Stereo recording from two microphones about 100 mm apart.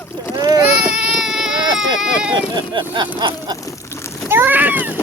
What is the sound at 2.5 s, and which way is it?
Speech, 50° right (ahead or behind).